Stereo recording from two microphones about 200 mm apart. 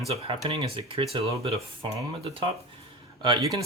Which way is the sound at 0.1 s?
30° right (ahead or behind).